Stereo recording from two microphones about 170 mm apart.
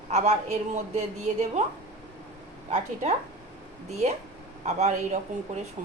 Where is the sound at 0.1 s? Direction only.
40° right (ahead or behind).